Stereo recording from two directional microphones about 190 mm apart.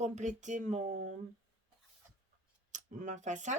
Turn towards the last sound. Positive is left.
turn(degrees=-40)  # may be behind; listen again after turning